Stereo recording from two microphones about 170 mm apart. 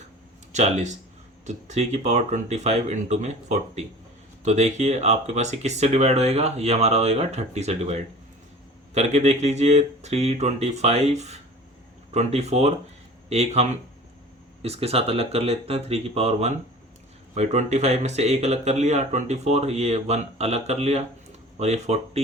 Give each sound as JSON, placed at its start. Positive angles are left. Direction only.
{"t": 0.5, "sound": "speech", "side_deg": -45}
{"t": 9.0, "sound": "speech", "side_deg": -40}